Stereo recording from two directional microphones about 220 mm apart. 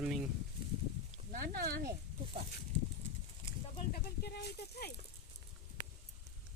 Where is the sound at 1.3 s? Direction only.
40° right (ahead or behind).